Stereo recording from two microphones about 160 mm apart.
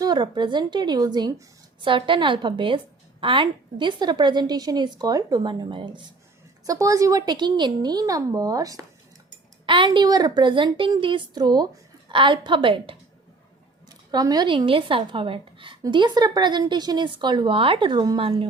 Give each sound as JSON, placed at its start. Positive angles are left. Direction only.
{"t": 0.0, "sound": "a woman's voice", "side_deg": -30}
{"t": 14.1, "sound": "a woman's voice", "side_deg": -25}